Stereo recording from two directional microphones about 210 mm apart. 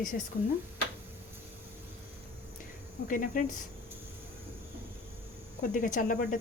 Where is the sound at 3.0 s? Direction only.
40° left (ahead or behind).